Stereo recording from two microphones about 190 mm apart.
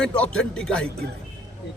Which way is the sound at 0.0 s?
5° left (ahead or behind).